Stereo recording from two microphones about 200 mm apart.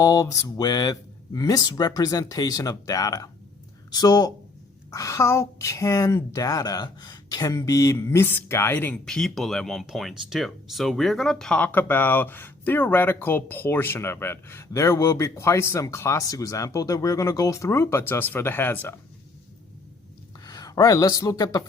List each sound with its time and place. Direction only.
0.0 s a woman's voice: 15° left (ahead or behind)
20.4 s speech: 20° left (ahead or behind)